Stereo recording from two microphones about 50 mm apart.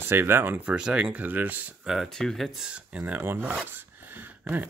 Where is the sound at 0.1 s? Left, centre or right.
Right.